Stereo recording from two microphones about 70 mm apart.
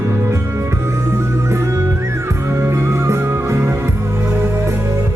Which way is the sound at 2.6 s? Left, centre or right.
Right.